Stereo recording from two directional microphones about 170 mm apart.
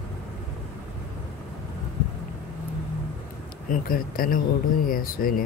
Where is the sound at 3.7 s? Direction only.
55° left (ahead or behind).